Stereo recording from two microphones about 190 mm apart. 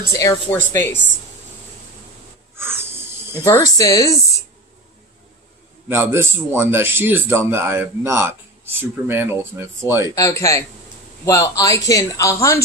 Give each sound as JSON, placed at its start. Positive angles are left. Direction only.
{"t": 0.2, "sound": "a man's voice", "side_deg": 15}
{"t": 2.6, "sound": "a sound", "side_deg": -10}
{"t": 3.4, "sound": "a man's voice", "side_deg": 15}
{"t": 5.9, "sound": "a man's voice", "side_deg": -10}
{"t": 10.2, "sound": "a man's voice", "side_deg": 15}